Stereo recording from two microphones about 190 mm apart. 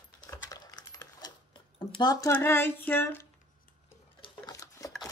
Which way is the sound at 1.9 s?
20° left (ahead or behind).